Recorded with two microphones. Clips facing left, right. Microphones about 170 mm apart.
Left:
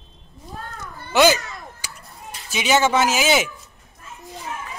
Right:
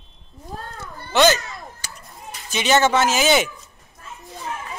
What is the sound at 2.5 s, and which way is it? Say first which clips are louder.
Speech: right 1 dB; 10° left (ahead or behind).